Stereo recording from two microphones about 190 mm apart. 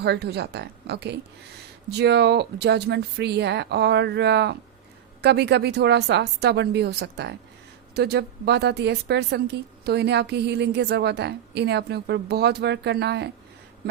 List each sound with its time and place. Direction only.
0.0 s a woman's voice: 60° right (ahead or behind)